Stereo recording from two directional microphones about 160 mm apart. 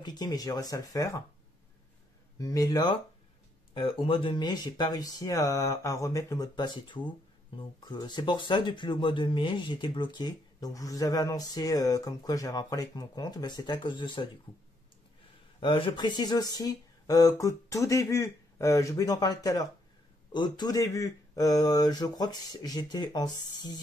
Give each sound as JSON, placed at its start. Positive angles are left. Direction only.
{"t": 0.0, "sound": "speech", "side_deg": 25}
{"t": 2.3, "sound": "speech", "side_deg": 20}
{"t": 3.7, "sound": "speech", "side_deg": 35}
{"t": 15.6, "sound": "speech", "side_deg": 35}